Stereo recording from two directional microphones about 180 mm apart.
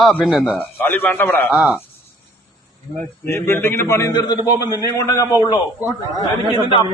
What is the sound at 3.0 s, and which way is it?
A man's voice, 15° left (ahead or behind).